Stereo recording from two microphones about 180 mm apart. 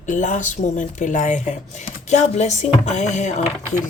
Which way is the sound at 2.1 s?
40° left (ahead or behind).